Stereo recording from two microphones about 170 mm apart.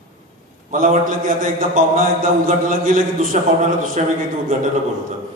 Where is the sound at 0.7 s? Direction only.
55° right (ahead or behind).